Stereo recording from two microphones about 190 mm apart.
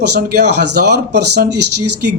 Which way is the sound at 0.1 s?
60° right (ahead or behind).